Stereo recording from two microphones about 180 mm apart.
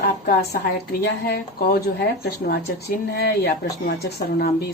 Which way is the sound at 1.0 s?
60° left (ahead or behind).